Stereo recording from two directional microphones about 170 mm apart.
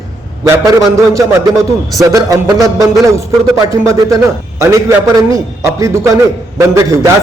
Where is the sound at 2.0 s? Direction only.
20° right (ahead or behind).